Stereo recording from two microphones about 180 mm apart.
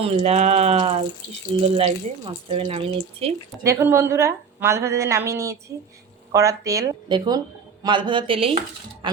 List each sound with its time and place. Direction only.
0.0 s speech: 35° right (ahead or behind)
3.6 s a woman's voice: 15° right (ahead or behind); by 8.5 s 30° right (ahead or behind)